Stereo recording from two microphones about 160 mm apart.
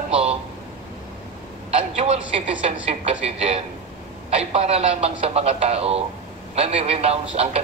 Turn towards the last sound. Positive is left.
turn(degrees=-40)  # may be behind; listen again after turning